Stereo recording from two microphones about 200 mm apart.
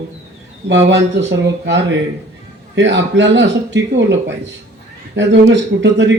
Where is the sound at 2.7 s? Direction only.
65° right (ahead or behind).